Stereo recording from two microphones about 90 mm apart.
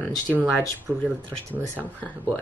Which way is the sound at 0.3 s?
20° right (ahead or behind).